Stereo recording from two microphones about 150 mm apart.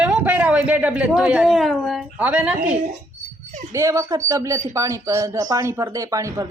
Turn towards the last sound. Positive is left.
turn(degrees=-20)  # may be behind; listen again after turning